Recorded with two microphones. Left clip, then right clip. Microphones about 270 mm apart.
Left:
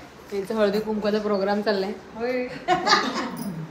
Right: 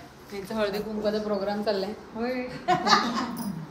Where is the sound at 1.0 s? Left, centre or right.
Left.